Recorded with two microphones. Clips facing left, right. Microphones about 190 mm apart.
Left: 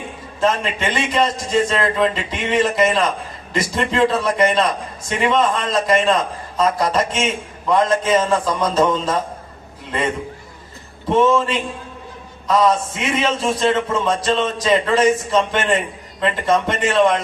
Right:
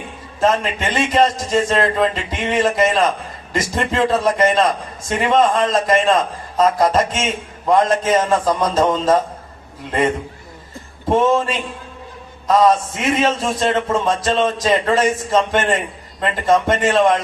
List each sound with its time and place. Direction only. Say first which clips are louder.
0.3 s a man's voice: right 2 dB; 45° right (ahead or behind)
11.1 s a man's voice: even; 45° right (ahead or behind)